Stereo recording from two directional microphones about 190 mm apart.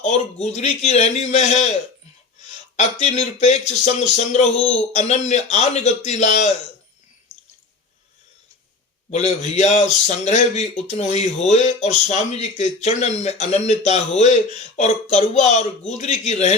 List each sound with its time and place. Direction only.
0.0 s speech: 35° left (ahead or behind)
9.0 s speech: 35° left (ahead or behind)